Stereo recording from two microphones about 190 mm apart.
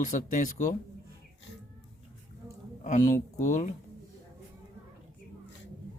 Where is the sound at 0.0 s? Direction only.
40° left (ahead or behind).